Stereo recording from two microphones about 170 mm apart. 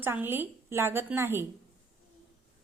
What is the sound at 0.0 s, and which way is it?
A woman's voice, 10° right (ahead or behind).